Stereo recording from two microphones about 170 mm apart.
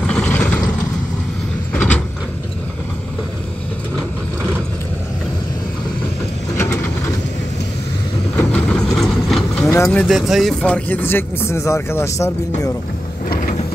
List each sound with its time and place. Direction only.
0.0 s vehicle: 5° left (ahead or behind)
1.7 s mechanisms: 10° left (ahead or behind)
6.5 s a sound: 15° left (ahead or behind)
8.4 s vehicle: 5° left (ahead or behind)
9.8 s speech: centre (ahead or behind); by 12.7 s 15° left (ahead or behind)